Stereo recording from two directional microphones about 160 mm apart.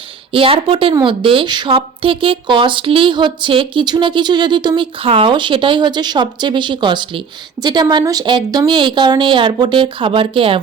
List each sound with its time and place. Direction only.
0.3 s a woman's voice: 35° right (ahead or behind)